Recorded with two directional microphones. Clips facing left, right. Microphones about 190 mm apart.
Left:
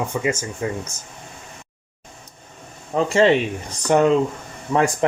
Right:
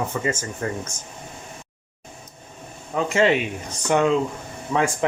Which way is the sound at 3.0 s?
30° left (ahead or behind).